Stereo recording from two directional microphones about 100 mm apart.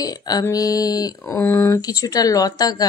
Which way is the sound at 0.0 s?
40° left (ahead or behind).